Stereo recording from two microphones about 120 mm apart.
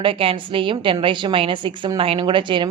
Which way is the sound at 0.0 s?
50° right (ahead or behind).